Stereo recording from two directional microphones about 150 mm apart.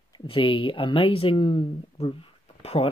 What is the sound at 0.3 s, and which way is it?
Speech, 35° left (ahead or behind).